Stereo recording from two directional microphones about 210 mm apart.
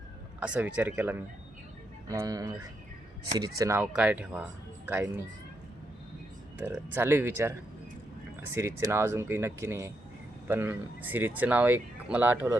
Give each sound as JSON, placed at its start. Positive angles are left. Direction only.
{"t": 0.3, "sound": "speech", "side_deg": -5}
{"t": 6.6, "sound": "speech", "side_deg": -10}